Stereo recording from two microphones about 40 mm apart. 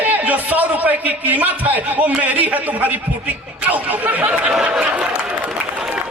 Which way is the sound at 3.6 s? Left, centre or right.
Right.